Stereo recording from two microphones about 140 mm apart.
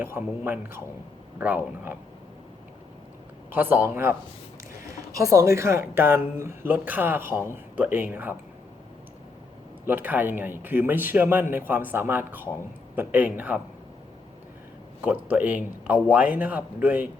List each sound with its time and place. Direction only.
0.0 s speech: 15° right (ahead or behind)
3.5 s speech: 15° right (ahead or behind)
9.8 s speech: 15° right (ahead or behind)
15.0 s speech: 10° right (ahead or behind)